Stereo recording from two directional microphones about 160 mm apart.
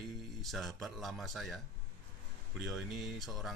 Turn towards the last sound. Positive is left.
turn(degrees=0)  # may be behind; listen again after turning